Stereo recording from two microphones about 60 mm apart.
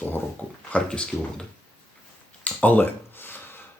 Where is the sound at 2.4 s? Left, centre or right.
Left.